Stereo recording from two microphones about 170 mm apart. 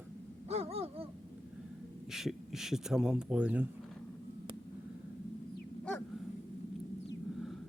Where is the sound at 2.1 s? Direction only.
Centre (ahead or behind).